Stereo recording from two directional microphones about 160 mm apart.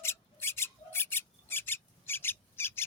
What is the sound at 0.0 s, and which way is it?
Rub, 15° left (ahead or behind).